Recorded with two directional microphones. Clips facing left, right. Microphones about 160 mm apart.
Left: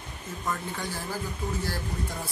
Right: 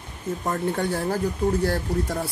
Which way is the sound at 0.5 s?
60° right (ahead or behind).